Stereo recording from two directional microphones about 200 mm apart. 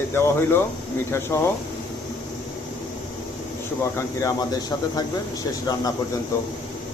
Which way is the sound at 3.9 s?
15° left (ahead or behind).